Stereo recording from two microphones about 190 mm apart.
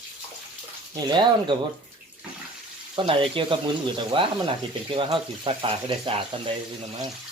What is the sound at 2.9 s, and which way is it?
Speech, 25° right (ahead or behind).